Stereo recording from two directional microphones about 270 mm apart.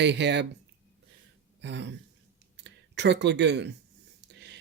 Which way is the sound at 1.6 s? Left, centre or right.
Right.